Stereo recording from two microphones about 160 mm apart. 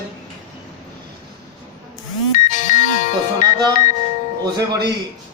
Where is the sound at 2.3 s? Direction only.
50° left (ahead or behind).